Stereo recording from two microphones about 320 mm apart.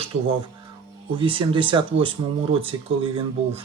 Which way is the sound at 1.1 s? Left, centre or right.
Centre.